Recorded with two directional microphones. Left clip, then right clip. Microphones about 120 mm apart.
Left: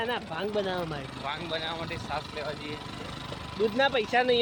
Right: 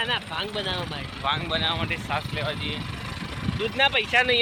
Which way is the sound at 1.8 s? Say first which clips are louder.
Right 6 dB; 5° right (ahead or behind).